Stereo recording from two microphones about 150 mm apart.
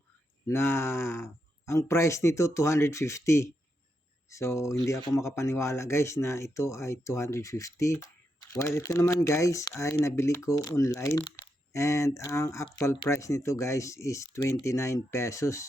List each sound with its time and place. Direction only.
0.4 s speech: 15° left (ahead or behind)